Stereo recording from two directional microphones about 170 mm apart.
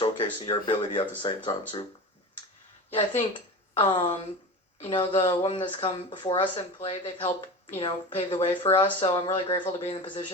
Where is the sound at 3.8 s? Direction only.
30° left (ahead or behind).